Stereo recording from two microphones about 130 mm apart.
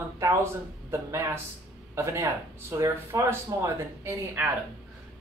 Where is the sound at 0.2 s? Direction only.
20° right (ahead or behind).